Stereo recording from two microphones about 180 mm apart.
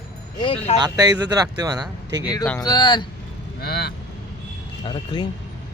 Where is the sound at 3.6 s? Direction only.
60° left (ahead or behind).